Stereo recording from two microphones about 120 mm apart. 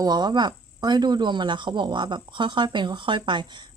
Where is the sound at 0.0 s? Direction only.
35° right (ahead or behind).